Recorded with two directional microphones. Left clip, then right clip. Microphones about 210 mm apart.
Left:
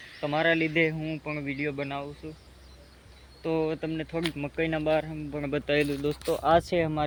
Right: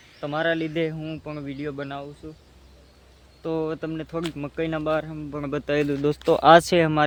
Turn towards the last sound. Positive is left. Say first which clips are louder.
# right 7 dB
turn(degrees=-45)  # may be behind; listen again after turning